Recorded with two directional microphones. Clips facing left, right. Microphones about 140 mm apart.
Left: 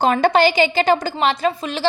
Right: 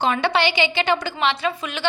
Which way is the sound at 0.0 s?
45° left (ahead or behind).